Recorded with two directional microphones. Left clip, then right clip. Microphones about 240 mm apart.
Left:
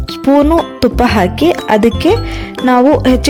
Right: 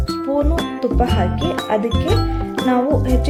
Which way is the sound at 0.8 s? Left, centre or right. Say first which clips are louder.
Left 8 dB; left.